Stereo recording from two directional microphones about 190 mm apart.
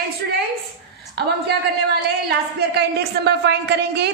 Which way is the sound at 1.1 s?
60° right (ahead or behind).